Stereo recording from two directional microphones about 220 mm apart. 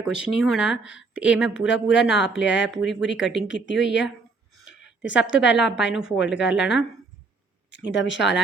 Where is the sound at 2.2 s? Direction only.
55° left (ahead or behind).